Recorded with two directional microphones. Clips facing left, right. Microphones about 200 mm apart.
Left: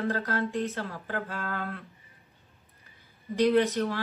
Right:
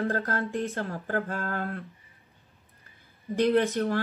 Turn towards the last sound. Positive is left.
turn(degrees=-50)  # may be behind; listen again after turning